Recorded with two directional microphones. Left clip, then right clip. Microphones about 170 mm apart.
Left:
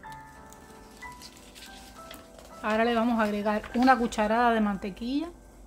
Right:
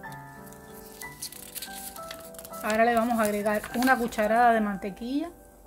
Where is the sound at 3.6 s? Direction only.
90° right.